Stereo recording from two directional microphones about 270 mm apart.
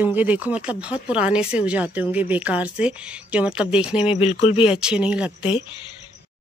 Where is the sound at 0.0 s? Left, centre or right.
Centre.